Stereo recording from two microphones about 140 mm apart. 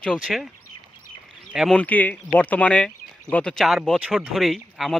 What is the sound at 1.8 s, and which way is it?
Speech, 10° left (ahead or behind).